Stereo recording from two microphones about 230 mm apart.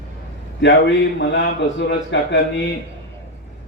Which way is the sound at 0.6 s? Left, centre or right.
Left.